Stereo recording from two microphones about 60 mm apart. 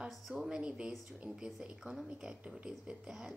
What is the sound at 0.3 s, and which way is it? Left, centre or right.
Speech, centre.